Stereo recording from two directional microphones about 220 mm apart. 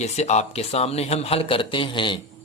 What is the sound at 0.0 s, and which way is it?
Speech, 30° left (ahead or behind).